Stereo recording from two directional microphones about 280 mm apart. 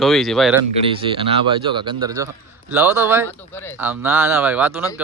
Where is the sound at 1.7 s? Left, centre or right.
Centre.